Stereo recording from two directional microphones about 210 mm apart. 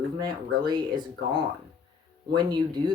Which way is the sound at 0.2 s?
20° right (ahead or behind).